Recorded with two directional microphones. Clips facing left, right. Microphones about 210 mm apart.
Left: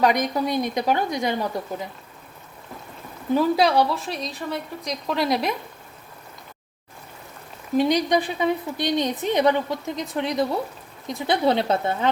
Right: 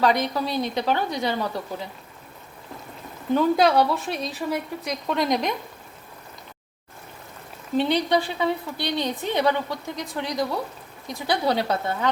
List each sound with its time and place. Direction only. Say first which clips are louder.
0.0 s a woman's voice: left 1 dB; 15° left (ahead or behind)
3.3 s a woman's voice: even; centre (ahead or behind)
7.8 s a woman's voice: left 2 dB; 15° left (ahead or behind)